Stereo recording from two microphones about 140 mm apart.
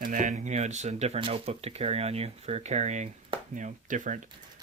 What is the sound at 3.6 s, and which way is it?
Speech, 65° right (ahead or behind).